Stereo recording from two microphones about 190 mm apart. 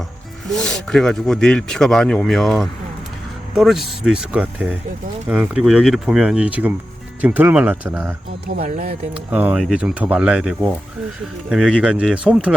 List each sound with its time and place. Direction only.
0.5 s speech: 5° left (ahead or behind)
8.6 s speech: 40° right (ahead or behind)
9.1 s speech: 5° right (ahead or behind)